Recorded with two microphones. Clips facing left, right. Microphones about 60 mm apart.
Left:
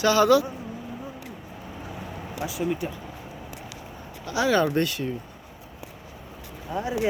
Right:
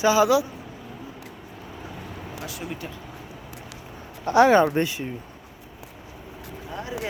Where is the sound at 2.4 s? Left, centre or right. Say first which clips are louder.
Left 8 dB; centre.